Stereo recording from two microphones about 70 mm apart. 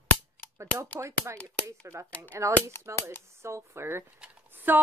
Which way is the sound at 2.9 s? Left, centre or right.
Right.